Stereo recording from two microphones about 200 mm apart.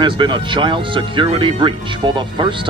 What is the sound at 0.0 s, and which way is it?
Speech, 25° right (ahead or behind).